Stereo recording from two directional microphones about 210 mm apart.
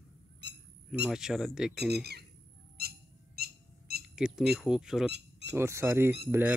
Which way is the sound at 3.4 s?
50° right (ahead or behind).